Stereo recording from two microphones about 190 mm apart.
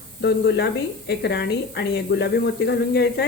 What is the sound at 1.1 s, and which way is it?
Speech, 60° left (ahead or behind).